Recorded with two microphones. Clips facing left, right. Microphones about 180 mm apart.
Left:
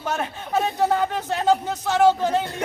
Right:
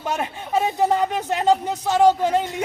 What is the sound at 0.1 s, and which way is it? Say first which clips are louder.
Speech: right 1 dB; 15° right (ahead or behind).